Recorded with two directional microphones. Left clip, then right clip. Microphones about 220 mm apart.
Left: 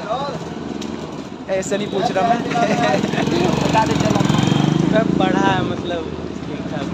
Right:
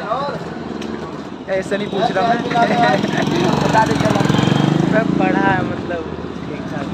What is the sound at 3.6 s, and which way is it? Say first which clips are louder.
Speech: right 4 dB; 25° right (ahead or behind).